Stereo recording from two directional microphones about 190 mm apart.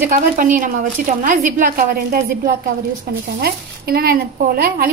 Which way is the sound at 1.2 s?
45° right (ahead or behind).